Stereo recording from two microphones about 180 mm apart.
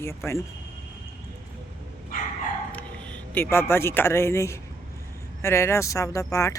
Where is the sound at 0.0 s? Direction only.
15° left (ahead or behind).